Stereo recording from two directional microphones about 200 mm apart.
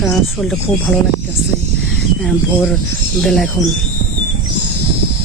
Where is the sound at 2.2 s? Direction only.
Centre (ahead or behind).